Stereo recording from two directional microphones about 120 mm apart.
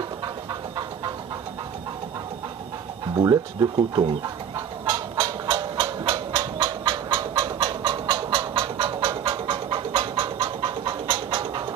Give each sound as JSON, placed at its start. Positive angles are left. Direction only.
{"t": 0.2, "sound": "a sound", "side_deg": -35}
{"t": 3.2, "sound": "speech", "side_deg": -30}
{"t": 3.9, "sound": "bird", "side_deg": -35}